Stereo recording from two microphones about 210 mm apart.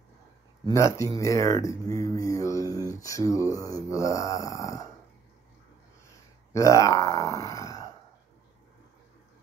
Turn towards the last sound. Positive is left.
turn(degrees=15)  # may be behind; listen again after turning